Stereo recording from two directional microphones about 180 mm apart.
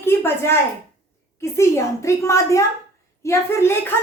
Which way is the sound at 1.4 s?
15° left (ahead or behind).